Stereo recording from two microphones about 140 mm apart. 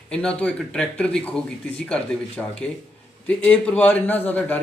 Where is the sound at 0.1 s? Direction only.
10° left (ahead or behind).